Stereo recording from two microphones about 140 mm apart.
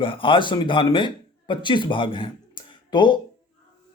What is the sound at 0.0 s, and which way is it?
A man's voice, 40° left (ahead or behind).